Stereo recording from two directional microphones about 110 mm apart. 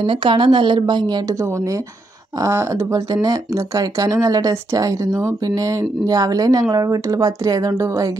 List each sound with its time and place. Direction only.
0.0 s speech: 50° right (ahead or behind)
2.4 s speech: 30° right (ahead or behind)